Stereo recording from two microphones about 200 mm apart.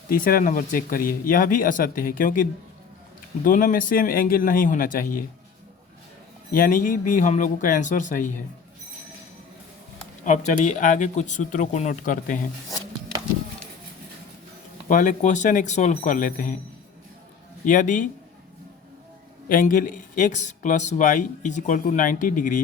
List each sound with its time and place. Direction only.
0.1 s speech: 45° left (ahead or behind)
6.5 s speech: 45° left (ahead or behind)
10.2 s speech: 35° left (ahead or behind)
14.8 s speech: 40° left (ahead or behind)
17.7 s speech: 40° left (ahead or behind)
19.5 s speech: 45° left (ahead or behind)